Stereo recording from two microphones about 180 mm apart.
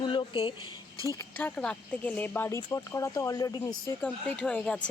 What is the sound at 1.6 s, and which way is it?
Speech, 5° left (ahead or behind).